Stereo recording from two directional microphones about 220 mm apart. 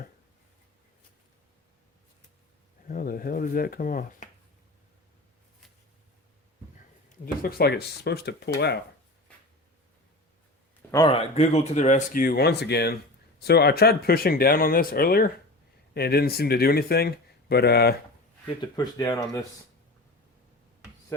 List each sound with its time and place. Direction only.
2.8 s speech: 40° left (ahead or behind)
7.4 s speech: 45° left (ahead or behind)
10.9 s speech: 20° left (ahead or behind); by 17.9 s 50° left (ahead or behind)
18.6 s speech: 15° left (ahead or behind)